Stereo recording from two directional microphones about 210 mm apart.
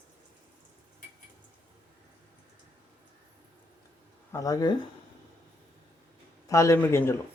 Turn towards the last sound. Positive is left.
turn(degrees=10)  # may be behind; listen again after turning